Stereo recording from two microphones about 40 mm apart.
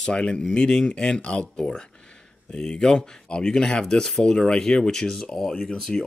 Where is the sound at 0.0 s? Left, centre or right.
Left.